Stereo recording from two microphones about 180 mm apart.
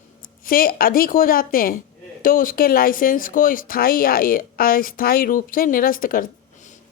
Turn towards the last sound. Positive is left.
turn(degrees=50)  # may be behind; listen again after turning